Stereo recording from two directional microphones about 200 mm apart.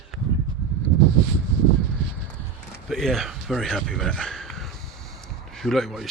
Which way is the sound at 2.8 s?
Centre (ahead or behind).